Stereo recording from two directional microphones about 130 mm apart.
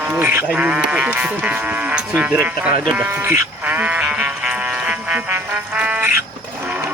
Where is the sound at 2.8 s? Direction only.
Centre (ahead or behind).